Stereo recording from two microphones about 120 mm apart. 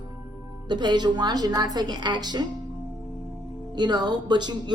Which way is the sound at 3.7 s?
35° right (ahead or behind).